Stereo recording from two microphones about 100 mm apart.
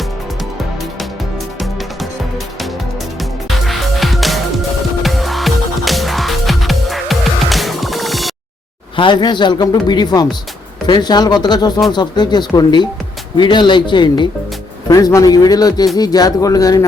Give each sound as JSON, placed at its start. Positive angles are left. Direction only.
{"t": 3.7, "sound": "music", "side_deg": 0}
{"t": 9.0, "sound": "speech", "side_deg": 50}
{"t": 14.8, "sound": "a man's voice", "side_deg": 35}